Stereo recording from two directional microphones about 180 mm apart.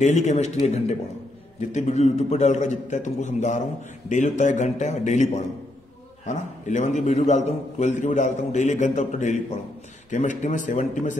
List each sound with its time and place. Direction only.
0.0 s a man's voice: 40° left (ahead or behind)